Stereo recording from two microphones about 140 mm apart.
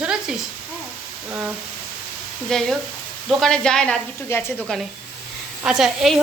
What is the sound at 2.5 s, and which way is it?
Speech, 5° left (ahead or behind).